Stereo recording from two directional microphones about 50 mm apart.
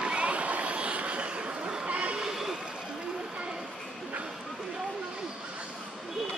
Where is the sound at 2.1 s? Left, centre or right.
Centre.